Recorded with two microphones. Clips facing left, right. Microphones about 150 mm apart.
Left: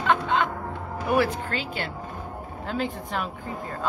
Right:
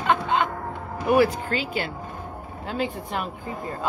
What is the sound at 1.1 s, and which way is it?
Speech, 10° right (ahead or behind).